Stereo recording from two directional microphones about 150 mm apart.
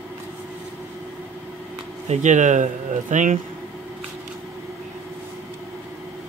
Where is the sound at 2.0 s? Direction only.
55° right (ahead or behind).